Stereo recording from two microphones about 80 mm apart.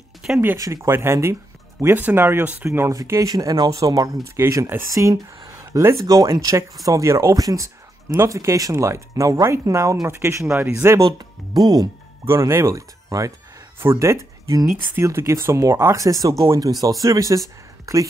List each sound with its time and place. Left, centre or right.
0.2 s a sound: centre
0.8 s speech: right
2.9 s speech: right
4.4 s speech: right
4.8 s speech: right
6.0 s speech: right
11.5 s speech: right
12.3 s speech: right